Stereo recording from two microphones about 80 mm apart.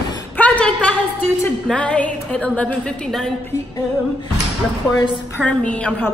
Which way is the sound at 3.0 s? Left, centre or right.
Centre.